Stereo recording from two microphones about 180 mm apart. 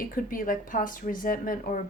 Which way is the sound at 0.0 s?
50° left (ahead or behind).